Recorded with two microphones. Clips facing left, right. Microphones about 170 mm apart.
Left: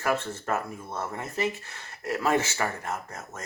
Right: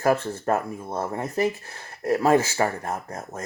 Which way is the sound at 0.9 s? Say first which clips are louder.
Right 6 dB; 35° right (ahead or behind).